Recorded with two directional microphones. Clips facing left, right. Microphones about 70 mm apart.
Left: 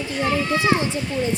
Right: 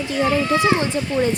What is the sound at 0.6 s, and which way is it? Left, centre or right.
Speech, right.